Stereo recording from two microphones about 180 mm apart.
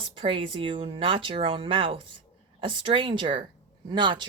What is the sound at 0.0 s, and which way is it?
A woman's voice, 30° right (ahead or behind).